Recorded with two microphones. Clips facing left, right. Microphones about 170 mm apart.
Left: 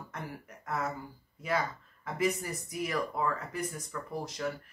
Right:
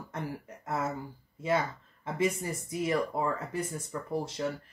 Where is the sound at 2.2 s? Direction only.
25° right (ahead or behind).